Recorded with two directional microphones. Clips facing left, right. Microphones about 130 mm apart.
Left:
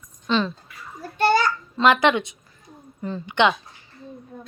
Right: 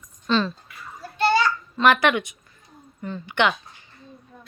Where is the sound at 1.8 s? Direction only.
20° left (ahead or behind).